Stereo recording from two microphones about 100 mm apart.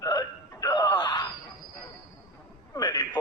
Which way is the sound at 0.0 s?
35° left (ahead or behind).